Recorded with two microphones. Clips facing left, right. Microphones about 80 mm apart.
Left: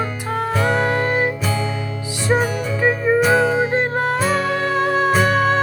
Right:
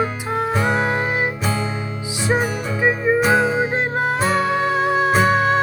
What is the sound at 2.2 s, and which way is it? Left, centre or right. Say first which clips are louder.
Music: left 2 dB; centre.